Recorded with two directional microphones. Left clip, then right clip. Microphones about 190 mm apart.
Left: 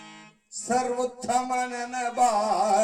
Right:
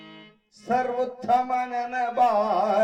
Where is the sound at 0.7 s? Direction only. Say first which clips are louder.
Right 1 dB; 45° right (ahead or behind).